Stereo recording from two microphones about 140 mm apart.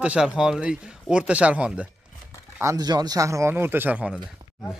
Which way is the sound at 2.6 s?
25° right (ahead or behind).